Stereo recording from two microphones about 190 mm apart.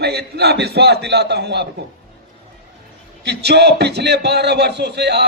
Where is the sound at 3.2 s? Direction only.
60° right (ahead or behind).